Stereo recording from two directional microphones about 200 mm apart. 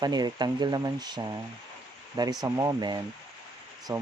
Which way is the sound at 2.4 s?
20° right (ahead or behind).